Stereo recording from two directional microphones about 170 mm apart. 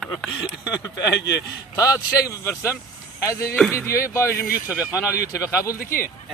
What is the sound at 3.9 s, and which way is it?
Speech, 15° left (ahead or behind).